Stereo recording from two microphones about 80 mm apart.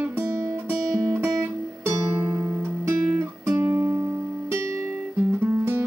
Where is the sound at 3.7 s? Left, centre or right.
Right.